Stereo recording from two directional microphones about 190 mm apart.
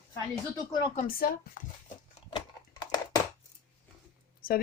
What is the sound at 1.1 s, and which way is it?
Speech, 50° left (ahead or behind).